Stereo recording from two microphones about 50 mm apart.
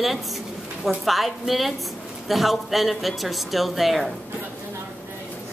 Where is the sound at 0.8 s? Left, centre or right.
Centre.